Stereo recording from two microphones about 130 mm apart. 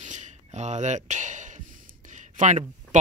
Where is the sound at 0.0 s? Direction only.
65° right (ahead or behind).